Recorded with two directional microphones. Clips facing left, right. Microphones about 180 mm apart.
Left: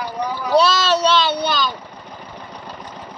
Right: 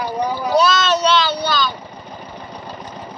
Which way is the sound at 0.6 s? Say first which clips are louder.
Even; 30° left (ahead or behind).